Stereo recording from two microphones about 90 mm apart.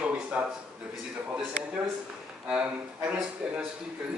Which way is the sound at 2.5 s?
10° right (ahead or behind).